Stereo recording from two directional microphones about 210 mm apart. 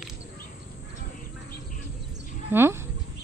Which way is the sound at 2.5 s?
10° right (ahead or behind).